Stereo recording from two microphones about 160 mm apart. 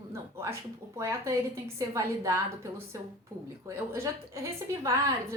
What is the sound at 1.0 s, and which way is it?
A woman's voice, 20° right (ahead or behind).